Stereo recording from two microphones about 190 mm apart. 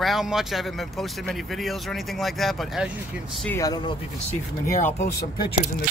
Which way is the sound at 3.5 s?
20° left (ahead or behind).